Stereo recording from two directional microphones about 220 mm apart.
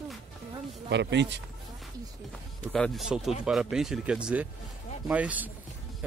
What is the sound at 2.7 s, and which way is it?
Speech, centre (ahead or behind).